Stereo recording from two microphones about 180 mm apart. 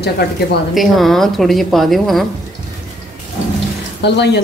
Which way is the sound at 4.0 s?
70° left (ahead or behind).